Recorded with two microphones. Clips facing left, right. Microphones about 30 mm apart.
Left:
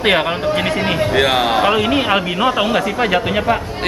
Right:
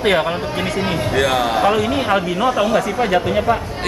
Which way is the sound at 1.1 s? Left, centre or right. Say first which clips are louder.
Left 1 dB; left.